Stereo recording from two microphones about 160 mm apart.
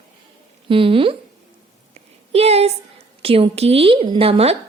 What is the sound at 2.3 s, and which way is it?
A woman's voice, 40° right (ahead or behind).